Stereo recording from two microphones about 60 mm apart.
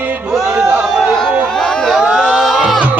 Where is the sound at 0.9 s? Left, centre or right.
Centre.